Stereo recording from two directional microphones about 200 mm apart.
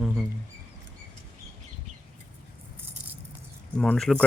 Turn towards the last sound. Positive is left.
turn(degrees=0)  # may be behind; listen again after turning